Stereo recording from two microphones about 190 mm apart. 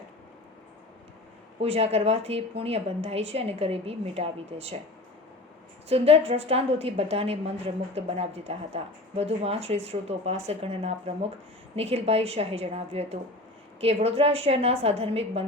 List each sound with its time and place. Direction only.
1.6 s speech: 35° right (ahead or behind)
5.9 s speech: 30° right (ahead or behind)